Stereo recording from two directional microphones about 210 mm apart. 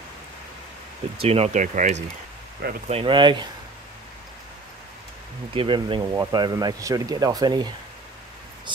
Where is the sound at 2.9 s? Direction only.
25° right (ahead or behind).